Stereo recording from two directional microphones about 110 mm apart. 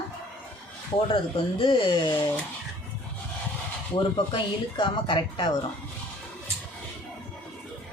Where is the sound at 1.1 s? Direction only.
55° left (ahead or behind).